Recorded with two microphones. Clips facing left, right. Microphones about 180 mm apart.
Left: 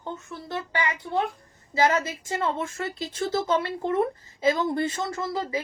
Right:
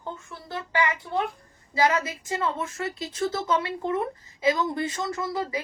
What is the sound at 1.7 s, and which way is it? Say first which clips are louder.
A woman's voice: left 1 dB; 25° left (ahead or behind).